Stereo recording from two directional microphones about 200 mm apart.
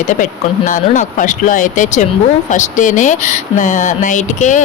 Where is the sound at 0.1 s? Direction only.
40° left (ahead or behind).